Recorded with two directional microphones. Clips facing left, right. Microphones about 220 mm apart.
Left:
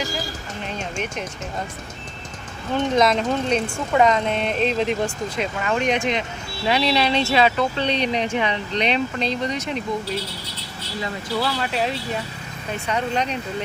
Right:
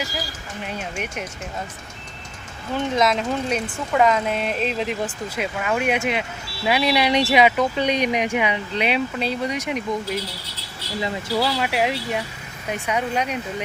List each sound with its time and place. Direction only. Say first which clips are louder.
2.9 s speech: left 2 dB; centre (ahead or behind)
11.4 s speech: right 1 dB; 15° right (ahead or behind)